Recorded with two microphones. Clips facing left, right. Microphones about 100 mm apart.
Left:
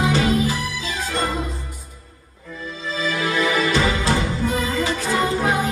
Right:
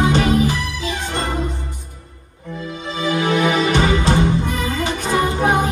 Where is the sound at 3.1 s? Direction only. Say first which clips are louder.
Right 5 dB; 25° right (ahead or behind).